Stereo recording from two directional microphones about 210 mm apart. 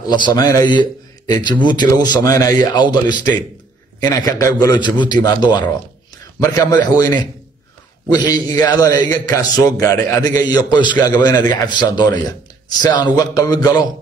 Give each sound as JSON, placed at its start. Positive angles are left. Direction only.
{"t": 0.0, "sound": "a man's voice", "side_deg": 20}
{"t": 4.6, "sound": "a man's voice", "side_deg": 20}
{"t": 10.2, "sound": "a man's voice", "side_deg": -40}
{"t": 10.5, "sound": "a man's voice", "side_deg": 20}